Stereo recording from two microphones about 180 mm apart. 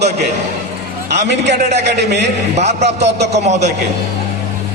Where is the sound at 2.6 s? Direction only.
40° right (ahead or behind).